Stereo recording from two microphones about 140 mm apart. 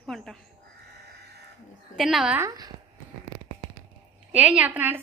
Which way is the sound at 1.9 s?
Centre (ahead or behind).